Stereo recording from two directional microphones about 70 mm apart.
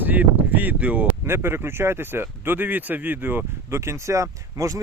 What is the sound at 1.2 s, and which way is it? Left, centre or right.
Speech, right.